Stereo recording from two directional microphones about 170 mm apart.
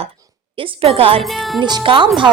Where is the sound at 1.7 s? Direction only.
25° right (ahead or behind).